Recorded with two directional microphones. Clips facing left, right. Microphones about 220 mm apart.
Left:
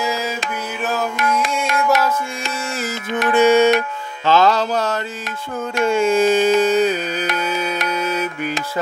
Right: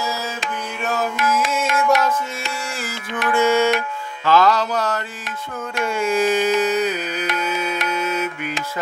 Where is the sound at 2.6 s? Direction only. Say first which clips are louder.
Left 5 dB; 20° left (ahead or behind).